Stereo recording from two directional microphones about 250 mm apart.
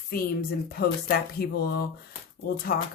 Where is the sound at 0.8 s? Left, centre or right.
Left.